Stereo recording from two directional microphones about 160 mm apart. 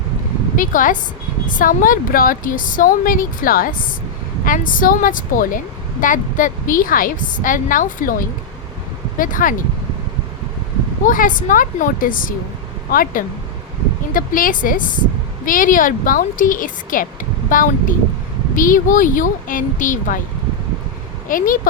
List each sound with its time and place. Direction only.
0.5 s a woman's voice: 55° left (ahead or behind)
9.1 s a woman's voice: 60° left (ahead or behind)
11.0 s a woman's voice: 60° left (ahead or behind)
21.2 s a woman's voice: 60° left (ahead or behind)